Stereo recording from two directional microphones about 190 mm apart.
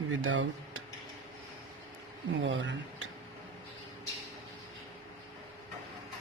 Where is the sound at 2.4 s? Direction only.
80° right.